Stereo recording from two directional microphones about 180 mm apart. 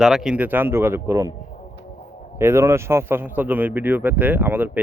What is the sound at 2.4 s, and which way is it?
Speech, 15° right (ahead or behind).